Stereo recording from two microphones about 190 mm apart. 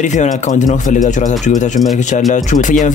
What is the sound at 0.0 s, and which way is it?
Speech, 40° left (ahead or behind).